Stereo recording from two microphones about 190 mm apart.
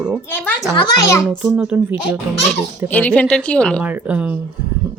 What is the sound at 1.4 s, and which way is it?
Speech, 5° right (ahead or behind).